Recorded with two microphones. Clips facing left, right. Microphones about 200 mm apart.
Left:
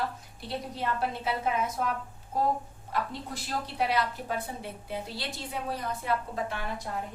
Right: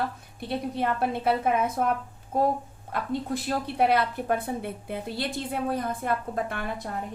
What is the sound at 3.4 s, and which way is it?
A woman's voice, 55° right (ahead or behind).